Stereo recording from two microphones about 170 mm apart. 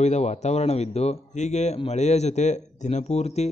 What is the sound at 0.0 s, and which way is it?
A man's voice, 40° left (ahead or behind).